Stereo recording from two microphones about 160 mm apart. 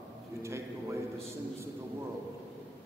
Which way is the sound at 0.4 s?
15° right (ahead or behind).